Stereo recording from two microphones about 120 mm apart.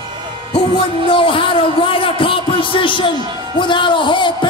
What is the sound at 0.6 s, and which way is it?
A man's voice, 50° left (ahead or behind).